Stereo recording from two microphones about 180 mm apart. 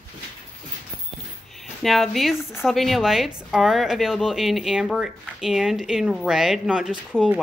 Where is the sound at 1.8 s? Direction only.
Centre (ahead or behind).